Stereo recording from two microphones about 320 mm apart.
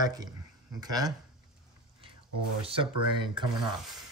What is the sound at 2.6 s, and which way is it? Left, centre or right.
Speech, centre.